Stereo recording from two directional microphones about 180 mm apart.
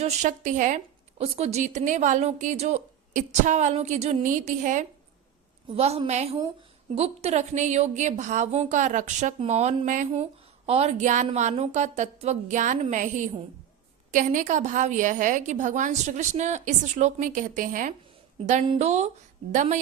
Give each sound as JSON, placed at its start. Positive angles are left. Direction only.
{"t": 0.0, "sound": "a woman's voice", "side_deg": -40}